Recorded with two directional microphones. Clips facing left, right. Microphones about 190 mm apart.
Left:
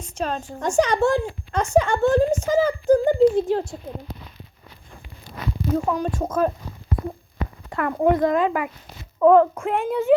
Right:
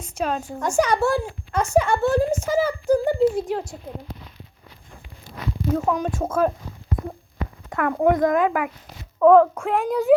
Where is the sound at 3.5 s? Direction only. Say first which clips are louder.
Left 4 dB; 30° left (ahead or behind).